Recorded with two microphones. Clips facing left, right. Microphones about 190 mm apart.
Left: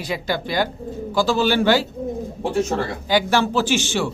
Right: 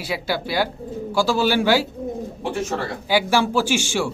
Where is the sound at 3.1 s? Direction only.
10° right (ahead or behind).